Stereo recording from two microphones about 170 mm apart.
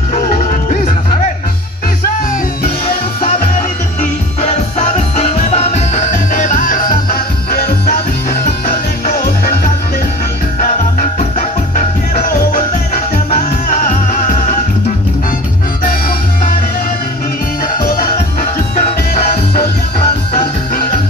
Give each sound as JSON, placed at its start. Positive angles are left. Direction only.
{"t": 4.4, "sound": "music", "side_deg": 40}
{"t": 13.3, "sound": "music", "side_deg": 50}
{"t": 17.7, "sound": "music", "side_deg": 55}